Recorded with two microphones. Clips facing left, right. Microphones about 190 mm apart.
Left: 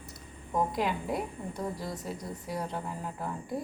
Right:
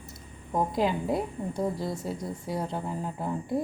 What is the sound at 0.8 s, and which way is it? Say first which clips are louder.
Speech: right 4 dB; 30° right (ahead or behind).